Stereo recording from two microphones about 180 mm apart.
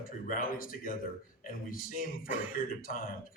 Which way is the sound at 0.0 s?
50° left (ahead or behind).